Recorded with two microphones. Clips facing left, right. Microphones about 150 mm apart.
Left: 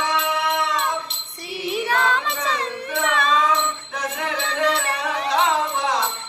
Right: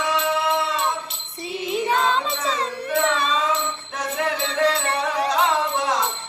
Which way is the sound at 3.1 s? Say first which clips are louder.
Left 2 dB; 30° right (ahead or behind).